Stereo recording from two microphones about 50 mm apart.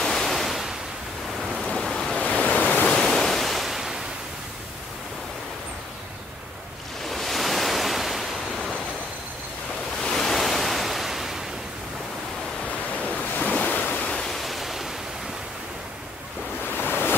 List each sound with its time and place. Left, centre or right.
0.0 s waves: centre
1.4 s ocean: centre
1.7 s waves: centre
2.1 s waves: left
2.9 s ocean: centre
3.2 s waves: centre
7.1 s waves: centre
10.0 s waves: centre
13.6 s waves: left
14.2 s waves: centre
16.6 s waves: left